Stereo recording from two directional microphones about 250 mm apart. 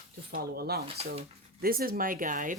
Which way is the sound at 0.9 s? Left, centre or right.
Right.